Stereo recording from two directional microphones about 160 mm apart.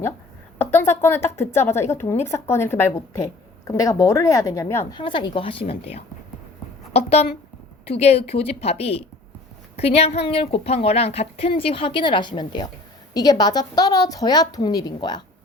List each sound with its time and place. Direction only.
0.6 s a woman's voice: 15° left (ahead or behind)
4.9 s a woman's voice: 30° left (ahead or behind)